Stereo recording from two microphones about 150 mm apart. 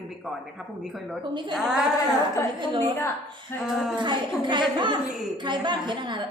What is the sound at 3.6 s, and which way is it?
Speech, 5° right (ahead or behind).